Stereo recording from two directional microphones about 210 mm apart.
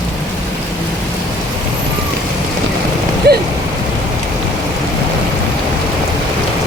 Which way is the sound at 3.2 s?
50° right (ahead or behind).